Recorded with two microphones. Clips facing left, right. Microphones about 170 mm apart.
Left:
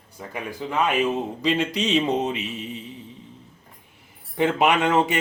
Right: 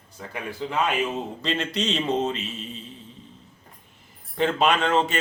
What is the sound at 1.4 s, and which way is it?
Speech, 10° left (ahead or behind).